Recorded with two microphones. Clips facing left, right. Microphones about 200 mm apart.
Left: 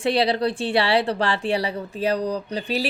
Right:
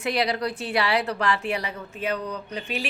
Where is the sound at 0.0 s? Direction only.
30° left (ahead or behind).